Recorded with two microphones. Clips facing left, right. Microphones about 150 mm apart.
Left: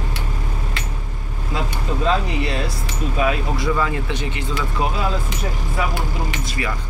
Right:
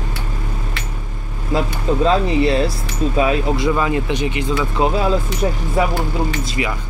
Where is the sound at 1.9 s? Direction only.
35° right (ahead or behind).